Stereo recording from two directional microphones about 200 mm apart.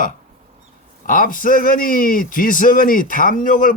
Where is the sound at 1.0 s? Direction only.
45° left (ahead or behind).